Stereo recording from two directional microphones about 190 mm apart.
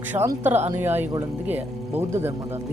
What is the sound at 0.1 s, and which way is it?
Speech, 10° right (ahead or behind).